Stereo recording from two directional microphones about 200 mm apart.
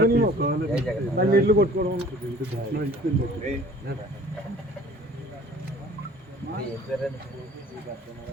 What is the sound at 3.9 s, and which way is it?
Speech, 50° right (ahead or behind).